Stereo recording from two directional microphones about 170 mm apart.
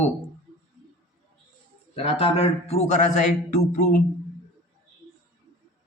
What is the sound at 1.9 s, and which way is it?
A man's voice, 35° left (ahead or behind).